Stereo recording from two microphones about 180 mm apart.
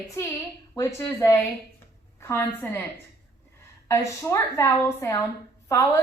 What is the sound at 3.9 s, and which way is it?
A woman's voice, 15° left (ahead or behind).